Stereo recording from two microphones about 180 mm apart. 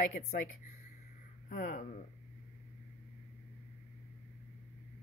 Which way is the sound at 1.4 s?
50° left (ahead or behind).